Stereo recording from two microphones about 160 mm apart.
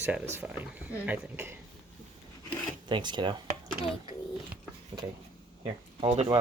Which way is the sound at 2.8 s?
30° right (ahead or behind).